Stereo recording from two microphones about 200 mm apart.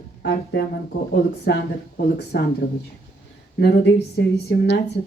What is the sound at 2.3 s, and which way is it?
Speech, 60° left (ahead or behind).